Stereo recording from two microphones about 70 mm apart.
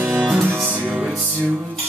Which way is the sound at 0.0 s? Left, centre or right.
Right.